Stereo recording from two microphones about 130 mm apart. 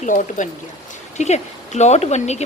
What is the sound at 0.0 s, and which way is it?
Speech, 75° left (ahead or behind).